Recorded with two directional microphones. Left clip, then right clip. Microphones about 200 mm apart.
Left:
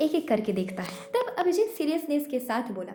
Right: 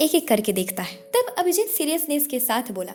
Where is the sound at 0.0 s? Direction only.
45° right (ahead or behind).